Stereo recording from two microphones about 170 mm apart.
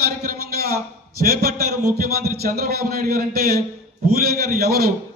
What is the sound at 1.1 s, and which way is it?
A man's voice, 65° right (ahead or behind).